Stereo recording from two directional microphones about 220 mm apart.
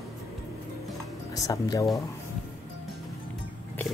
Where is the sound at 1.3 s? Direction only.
15° left (ahead or behind).